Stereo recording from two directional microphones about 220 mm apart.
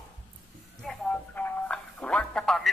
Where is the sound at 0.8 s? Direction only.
Centre (ahead or behind).